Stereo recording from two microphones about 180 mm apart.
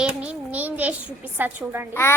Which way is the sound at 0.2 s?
10° right (ahead or behind).